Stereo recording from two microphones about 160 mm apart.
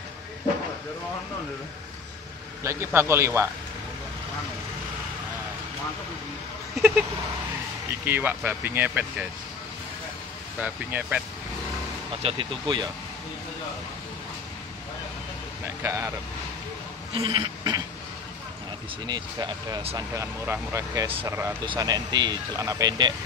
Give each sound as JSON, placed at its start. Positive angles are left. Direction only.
{"t": 2.6, "sound": "speech", "side_deg": -15}
{"t": 8.0, "sound": "speech", "side_deg": -15}
{"t": 10.6, "sound": "speech", "side_deg": -10}
{"t": 12.2, "sound": "speech", "side_deg": -35}
{"t": 15.8, "sound": "speech", "side_deg": -15}
{"t": 17.1, "sound": "speech", "side_deg": -35}
{"t": 19.0, "sound": "speech", "side_deg": -25}
{"t": 20.0, "sound": "speech", "side_deg": -15}